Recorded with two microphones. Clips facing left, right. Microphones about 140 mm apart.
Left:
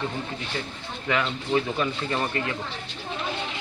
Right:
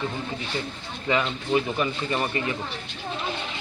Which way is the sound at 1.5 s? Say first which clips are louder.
Right 1 dB; 10° right (ahead or behind).